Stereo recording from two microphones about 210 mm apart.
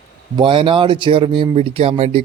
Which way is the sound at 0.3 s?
25° right (ahead or behind).